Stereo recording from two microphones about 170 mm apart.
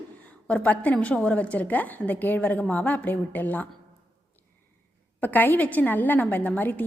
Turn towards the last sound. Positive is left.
turn(degrees=10)  # may be behind; listen again after turning